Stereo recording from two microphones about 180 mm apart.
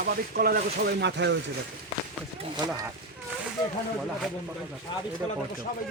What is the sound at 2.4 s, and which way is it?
Speech, 20° right (ahead or behind).